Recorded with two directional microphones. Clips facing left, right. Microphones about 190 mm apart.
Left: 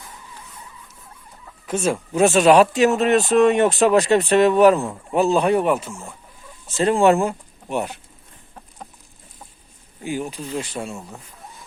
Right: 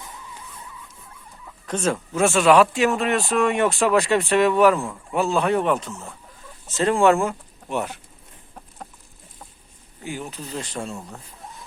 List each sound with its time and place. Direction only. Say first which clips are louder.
1.6 s speech: left 2 dB; 10° left (ahead or behind)
2.6 s speech: left 3 dB; 40° left (ahead or behind)
2.9 s speech: left 5 dB; 20° left (ahead or behind)
10.0 s speech: left 5 dB; 15° left (ahead or behind)